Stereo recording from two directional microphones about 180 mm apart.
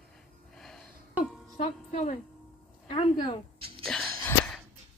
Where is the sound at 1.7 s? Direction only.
40° left (ahead or behind).